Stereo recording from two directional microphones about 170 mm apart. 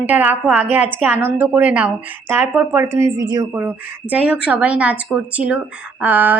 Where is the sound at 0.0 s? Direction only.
10° right (ahead or behind).